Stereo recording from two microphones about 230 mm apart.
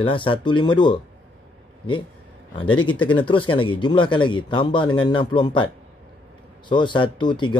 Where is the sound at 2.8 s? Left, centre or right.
Left.